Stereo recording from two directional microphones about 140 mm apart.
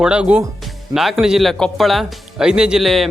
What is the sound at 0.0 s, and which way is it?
Speech, 5° right (ahead or behind).